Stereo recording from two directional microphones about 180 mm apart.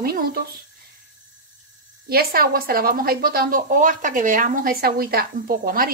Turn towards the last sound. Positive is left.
turn(degrees=-55)  # may be behind; listen again after turning